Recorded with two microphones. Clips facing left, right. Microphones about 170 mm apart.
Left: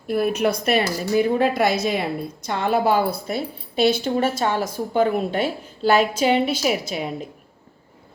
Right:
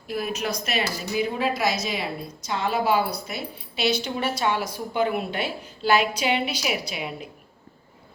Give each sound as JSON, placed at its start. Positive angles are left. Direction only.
{"t": 0.1, "sound": "a woman's voice", "side_deg": 55}